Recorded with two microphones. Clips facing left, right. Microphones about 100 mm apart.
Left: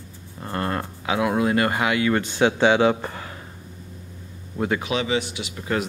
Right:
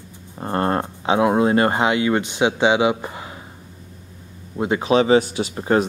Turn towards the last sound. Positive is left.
turn(degrees=-35)  # may be behind; listen again after turning